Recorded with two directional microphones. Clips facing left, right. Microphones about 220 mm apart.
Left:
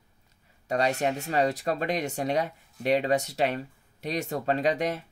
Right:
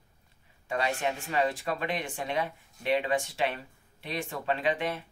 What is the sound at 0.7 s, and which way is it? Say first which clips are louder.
Speech: left 4 dB; 40° left (ahead or behind).